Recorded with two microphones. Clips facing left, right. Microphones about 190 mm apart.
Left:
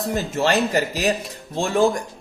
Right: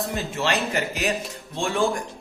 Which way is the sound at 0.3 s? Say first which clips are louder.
Left 5 dB; 40° left (ahead or behind).